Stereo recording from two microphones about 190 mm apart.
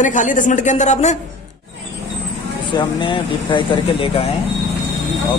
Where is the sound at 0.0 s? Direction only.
40° left (ahead or behind).